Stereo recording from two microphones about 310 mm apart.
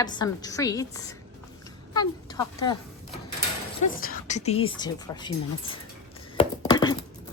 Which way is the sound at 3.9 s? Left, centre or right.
Left.